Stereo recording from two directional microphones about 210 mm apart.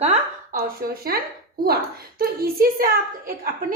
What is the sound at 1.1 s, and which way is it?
A woman's voice, 45° right (ahead or behind).